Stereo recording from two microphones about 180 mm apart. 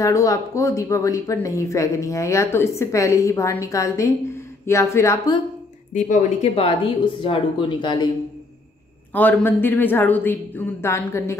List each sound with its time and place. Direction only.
0.0 s speech: 20° left (ahead or behind)
5.9 s speech: 45° left (ahead or behind); by 8.1 s 25° left (ahead or behind)
9.1 s speech: 10° left (ahead or behind)